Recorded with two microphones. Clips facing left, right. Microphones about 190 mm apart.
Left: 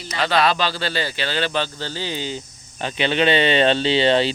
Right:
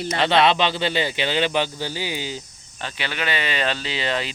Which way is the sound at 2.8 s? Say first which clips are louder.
Left 9 dB; 25° left (ahead or behind).